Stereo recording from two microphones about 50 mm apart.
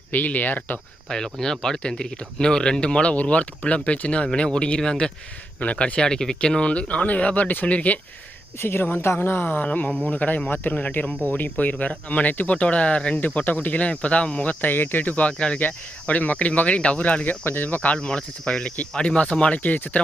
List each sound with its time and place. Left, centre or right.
0.1 s speech: left
1.0 s speech: centre; by 7.9 s left
8.5 s speech: left
9.6 s speech: left
13.1 s speech: left
14.6 s speech: left
17.4 s speech: left
19.5 s speech: left